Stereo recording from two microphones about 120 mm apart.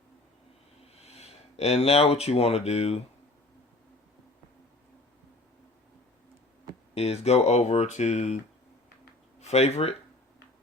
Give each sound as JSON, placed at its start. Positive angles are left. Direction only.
{"t": 0.9, "sound": "speech", "side_deg": 60}
{"t": 6.9, "sound": "speech", "side_deg": 60}
{"t": 9.4, "sound": "speech", "side_deg": 60}